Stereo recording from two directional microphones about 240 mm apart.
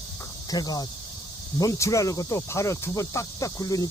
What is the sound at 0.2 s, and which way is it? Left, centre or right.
Cricket, centre.